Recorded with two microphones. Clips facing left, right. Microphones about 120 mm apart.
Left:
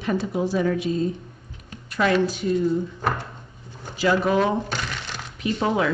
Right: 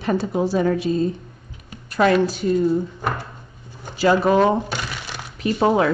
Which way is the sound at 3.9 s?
40° right (ahead or behind).